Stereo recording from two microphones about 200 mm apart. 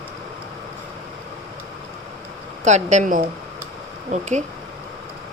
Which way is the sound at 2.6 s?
35° right (ahead or behind).